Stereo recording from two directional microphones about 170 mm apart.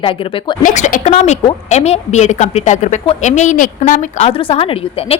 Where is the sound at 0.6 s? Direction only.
45° left (ahead or behind).